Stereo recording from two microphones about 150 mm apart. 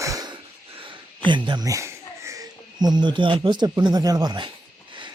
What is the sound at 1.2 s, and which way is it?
Speech, 30° right (ahead or behind).